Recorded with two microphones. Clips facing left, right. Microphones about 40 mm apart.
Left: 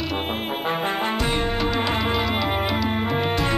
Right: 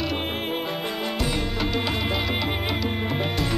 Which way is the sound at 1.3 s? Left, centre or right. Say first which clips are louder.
Left 3 dB; left.